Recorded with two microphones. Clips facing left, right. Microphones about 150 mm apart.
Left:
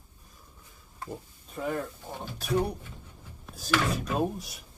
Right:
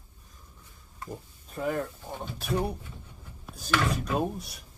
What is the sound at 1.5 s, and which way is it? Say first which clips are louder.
Speech: right 2 dB; centre (ahead or behind).